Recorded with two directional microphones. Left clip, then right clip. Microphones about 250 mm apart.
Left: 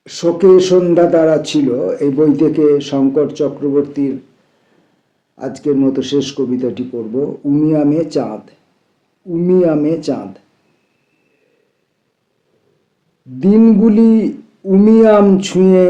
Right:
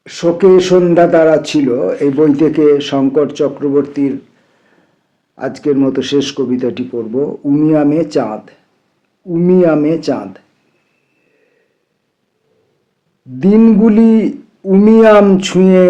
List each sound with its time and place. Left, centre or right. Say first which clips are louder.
0.0 s speech: right 1 dB; centre
5.3 s speech: right 2 dB; centre
13.4 s speech: right 1 dB; centre